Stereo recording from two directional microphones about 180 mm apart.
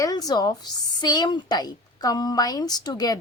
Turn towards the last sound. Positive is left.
turn(degrees=20)  # may be behind; listen again after turning